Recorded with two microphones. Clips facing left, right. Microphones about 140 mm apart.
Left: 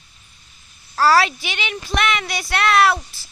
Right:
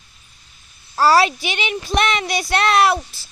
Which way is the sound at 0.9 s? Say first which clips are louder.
Right 1 dB; 20° right (ahead or behind).